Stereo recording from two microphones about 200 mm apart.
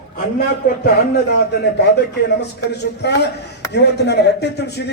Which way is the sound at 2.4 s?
55° left (ahead or behind).